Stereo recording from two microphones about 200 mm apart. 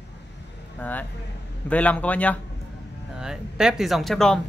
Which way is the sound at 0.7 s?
10° left (ahead or behind).